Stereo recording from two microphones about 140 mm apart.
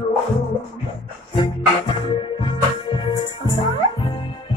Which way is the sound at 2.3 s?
35° left (ahead or behind).